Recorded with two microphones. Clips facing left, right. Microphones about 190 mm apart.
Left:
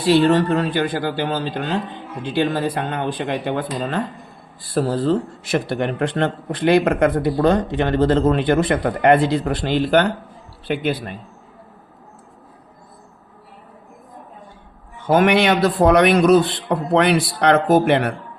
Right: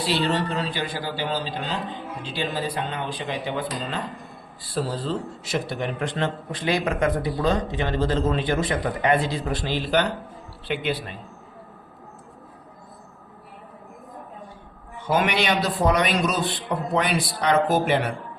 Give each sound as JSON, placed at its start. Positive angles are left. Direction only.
{"t": 0.1, "sound": "a man's voice", "side_deg": 50}
{"t": 15.0, "sound": "a man's voice", "side_deg": 55}